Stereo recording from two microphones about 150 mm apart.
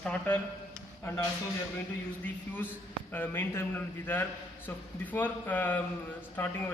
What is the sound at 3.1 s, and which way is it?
Speech, 15° left (ahead or behind).